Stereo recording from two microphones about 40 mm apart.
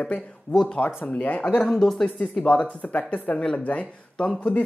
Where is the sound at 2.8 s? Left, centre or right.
Left.